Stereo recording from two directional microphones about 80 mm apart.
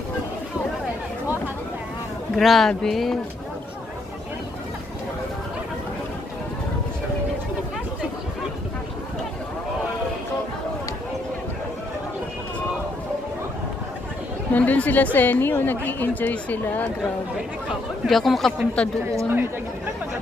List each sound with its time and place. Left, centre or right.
2.3 s speech: centre
14.5 s a woman's voice: centre
18.0 s speech: centre
19.0 s speech: right